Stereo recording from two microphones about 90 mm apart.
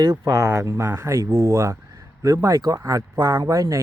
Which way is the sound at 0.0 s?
45° right (ahead or behind).